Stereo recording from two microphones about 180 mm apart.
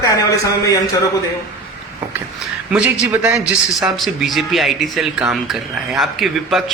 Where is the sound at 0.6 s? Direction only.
20° left (ahead or behind).